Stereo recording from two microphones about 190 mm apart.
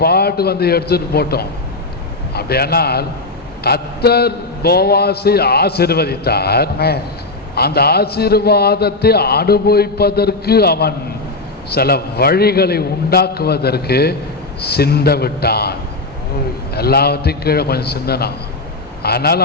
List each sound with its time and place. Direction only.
0.0 s a man's voice: 55° left (ahead or behind)